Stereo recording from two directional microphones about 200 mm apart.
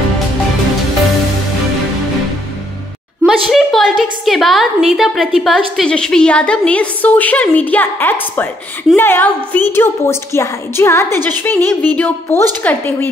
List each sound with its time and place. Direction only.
3.3 s a woman's voice: centre (ahead or behind)